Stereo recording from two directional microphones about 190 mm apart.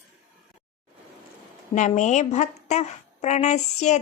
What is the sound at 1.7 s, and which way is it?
A woman's voice, 40° left (ahead or behind).